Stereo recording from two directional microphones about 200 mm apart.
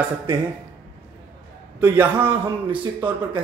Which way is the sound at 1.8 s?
10° right (ahead or behind).